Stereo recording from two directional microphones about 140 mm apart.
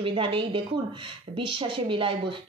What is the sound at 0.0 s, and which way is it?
A woman's voice, 40° right (ahead or behind).